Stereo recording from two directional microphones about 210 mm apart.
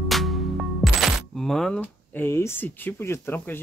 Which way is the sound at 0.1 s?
Centre (ahead or behind).